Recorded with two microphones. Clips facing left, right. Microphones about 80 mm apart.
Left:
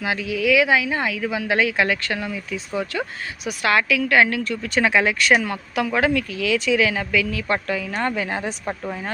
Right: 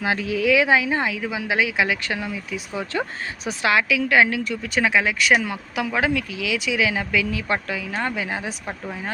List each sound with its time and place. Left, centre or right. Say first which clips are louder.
0.0 s speech: right 1 dB; right; by 8.7 s centre